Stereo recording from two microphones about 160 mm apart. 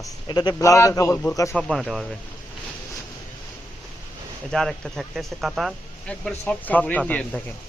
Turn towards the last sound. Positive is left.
turn(degrees=10)  # may be behind; listen again after turning